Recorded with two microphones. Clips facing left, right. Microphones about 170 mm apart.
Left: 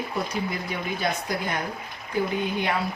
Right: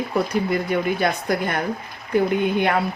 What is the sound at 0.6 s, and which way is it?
Speech, 60° right (ahead or behind).